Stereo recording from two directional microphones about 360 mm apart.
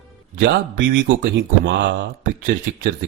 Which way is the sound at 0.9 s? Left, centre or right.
Right.